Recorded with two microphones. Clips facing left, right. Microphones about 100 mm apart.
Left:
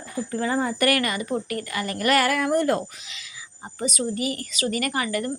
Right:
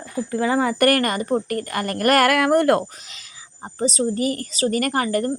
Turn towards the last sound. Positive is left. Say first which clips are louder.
# right 5 dB
turn(degrees=-40)  # may be behind; listen again after turning